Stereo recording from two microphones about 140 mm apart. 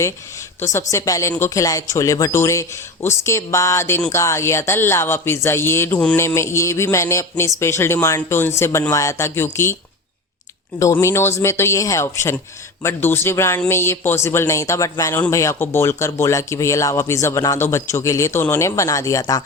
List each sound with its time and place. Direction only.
0.6 s a man's voice: 20° left (ahead or behind)
10.8 s speech: 20° left (ahead or behind)